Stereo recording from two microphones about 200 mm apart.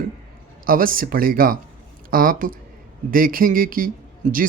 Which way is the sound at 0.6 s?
45° right (ahead or behind).